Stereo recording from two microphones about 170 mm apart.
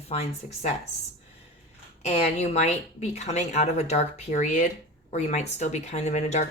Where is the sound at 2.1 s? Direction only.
40° left (ahead or behind).